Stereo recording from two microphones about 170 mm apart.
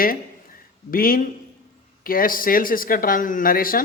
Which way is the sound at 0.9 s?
55° left (ahead or behind).